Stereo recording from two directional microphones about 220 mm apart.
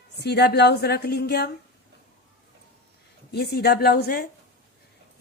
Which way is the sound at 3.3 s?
50° left (ahead or behind).